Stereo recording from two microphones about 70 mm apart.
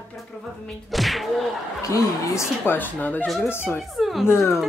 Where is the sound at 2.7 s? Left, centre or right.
Left.